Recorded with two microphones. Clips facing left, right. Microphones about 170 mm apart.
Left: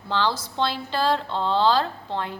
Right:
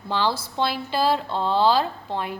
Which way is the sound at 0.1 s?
10° right (ahead or behind).